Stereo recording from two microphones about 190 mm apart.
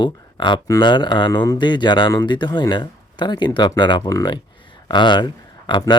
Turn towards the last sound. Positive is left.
turn(degrees=25)  # may be behind; listen again after turning